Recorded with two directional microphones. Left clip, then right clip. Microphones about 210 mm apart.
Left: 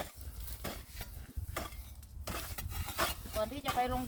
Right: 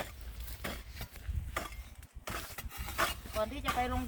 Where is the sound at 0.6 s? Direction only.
Centre (ahead or behind).